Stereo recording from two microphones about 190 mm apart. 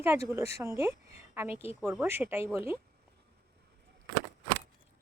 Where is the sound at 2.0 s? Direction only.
10° right (ahead or behind).